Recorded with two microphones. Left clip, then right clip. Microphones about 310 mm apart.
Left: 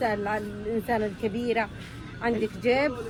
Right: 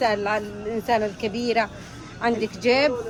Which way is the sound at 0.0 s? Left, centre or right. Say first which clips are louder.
Right 5 dB; right.